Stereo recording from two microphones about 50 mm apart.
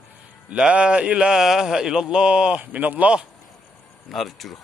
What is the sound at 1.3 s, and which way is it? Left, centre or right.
Speech, centre.